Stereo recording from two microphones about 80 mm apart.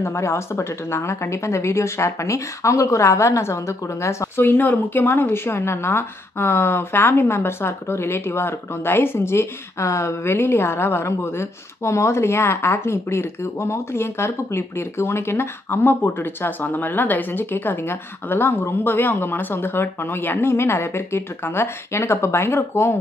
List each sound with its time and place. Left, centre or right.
0.0 s speech: left